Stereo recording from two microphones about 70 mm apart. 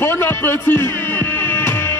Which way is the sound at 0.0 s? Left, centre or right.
Left.